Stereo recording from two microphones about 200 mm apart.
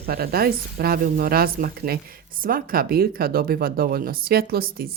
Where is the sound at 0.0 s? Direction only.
50° right (ahead or behind).